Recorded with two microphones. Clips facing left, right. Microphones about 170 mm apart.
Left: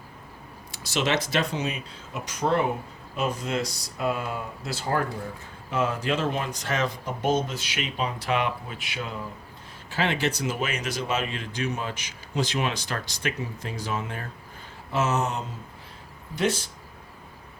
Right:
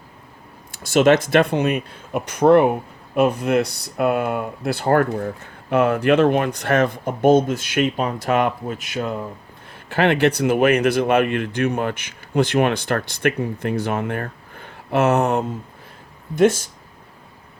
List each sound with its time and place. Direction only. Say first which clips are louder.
0.7 s speech: right 11 dB; 50° right (ahead or behind)
9.9 s speech: right 9 dB; 60° right (ahead or behind)